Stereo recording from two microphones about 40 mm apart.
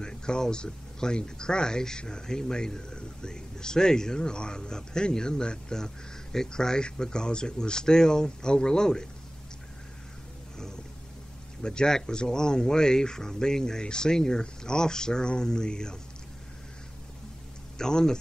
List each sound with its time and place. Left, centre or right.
0.0 s speech: centre
11.6 s speech: left
17.7 s speech: centre